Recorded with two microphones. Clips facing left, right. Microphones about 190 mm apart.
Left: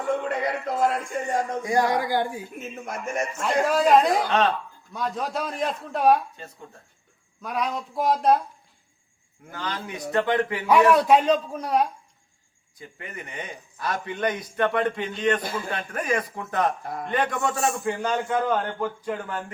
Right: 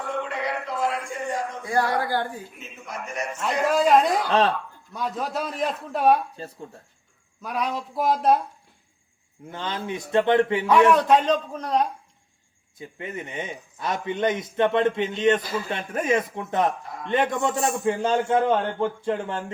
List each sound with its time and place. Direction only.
0.3 s a sound: 45° left (ahead or behind)
1.6 s a man's voice: 15° left (ahead or behind)
2.6 s a man's voice: 50° left (ahead or behind)
3.4 s a man's voice: centre (ahead or behind)
6.4 s speech: 35° right (ahead or behind)
7.4 s a man's voice: centre (ahead or behind)
9.5 s a man's voice: 25° right (ahead or behind)
10.7 s a man's voice: 10° left (ahead or behind)
13.0 s a man's voice: 25° right (ahead or behind)
16.8 s a man's voice: 55° left (ahead or behind)
17.1 s a man's voice: 20° right (ahead or behind)